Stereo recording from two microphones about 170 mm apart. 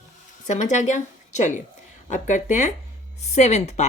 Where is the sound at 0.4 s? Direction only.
45° left (ahead or behind).